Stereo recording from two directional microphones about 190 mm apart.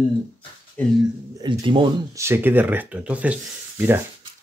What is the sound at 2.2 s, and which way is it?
Speech, 10° right (ahead or behind).